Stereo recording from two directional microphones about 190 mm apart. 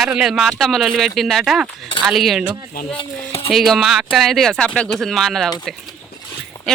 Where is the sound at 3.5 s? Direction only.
Centre (ahead or behind).